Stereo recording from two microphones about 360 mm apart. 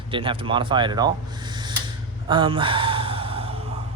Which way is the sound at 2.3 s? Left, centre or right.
Centre.